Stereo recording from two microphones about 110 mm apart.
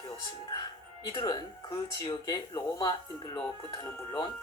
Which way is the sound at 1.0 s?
40° left (ahead or behind).